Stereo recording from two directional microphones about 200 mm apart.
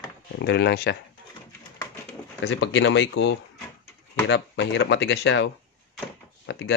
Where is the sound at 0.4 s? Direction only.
60° left (ahead or behind).